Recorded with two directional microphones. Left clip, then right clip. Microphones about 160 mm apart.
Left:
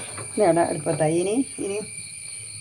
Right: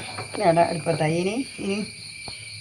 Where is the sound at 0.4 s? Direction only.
90° left.